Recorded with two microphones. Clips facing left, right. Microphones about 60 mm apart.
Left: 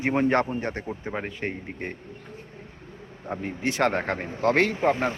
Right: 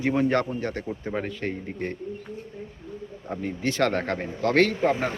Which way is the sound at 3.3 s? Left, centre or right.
Left.